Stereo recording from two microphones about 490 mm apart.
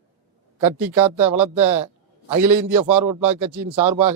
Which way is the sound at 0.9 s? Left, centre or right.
Right.